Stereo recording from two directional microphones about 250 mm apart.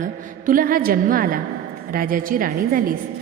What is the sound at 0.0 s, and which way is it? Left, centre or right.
A woman's voice, right.